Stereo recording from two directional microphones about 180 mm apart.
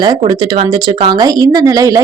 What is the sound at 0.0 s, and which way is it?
Speech, 25° right (ahead or behind).